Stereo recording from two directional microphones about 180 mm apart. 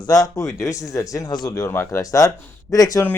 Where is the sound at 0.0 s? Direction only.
20° left (ahead or behind).